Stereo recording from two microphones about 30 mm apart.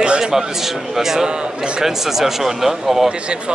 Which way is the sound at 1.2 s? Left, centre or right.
Right.